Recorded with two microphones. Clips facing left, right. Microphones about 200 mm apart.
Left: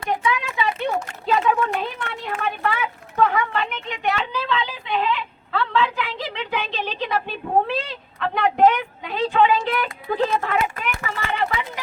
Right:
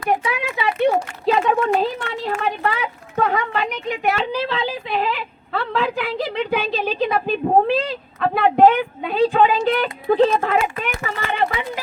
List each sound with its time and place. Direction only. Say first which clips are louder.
0.3 s speech: right 1 dB; 35° right (ahead or behind)